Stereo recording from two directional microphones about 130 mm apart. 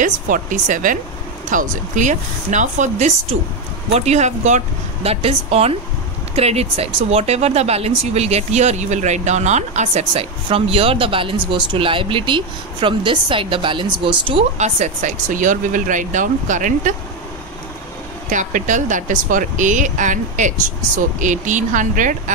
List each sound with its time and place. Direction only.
0.0 s speech: 75° right (ahead or behind); by 14.4 s 40° right (ahead or behind)
14.6 s speech: 65° right (ahead or behind)
18.3 s speech: 75° right (ahead or behind)